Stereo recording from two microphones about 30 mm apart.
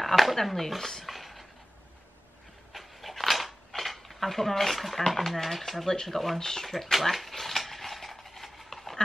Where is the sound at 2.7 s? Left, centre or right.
Centre.